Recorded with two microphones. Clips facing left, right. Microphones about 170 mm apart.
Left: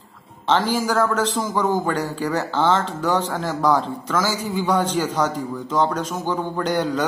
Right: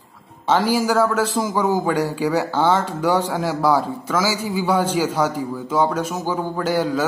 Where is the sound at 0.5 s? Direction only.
10° right (ahead or behind).